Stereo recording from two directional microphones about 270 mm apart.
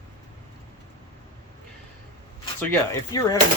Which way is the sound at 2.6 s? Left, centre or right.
Centre.